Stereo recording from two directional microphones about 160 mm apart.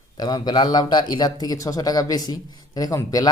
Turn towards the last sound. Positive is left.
turn(degrees=20)  # may be behind; listen again after turning